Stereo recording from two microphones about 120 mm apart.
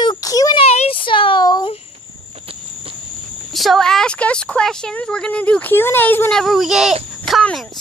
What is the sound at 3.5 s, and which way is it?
A woman's voice, centre (ahead or behind).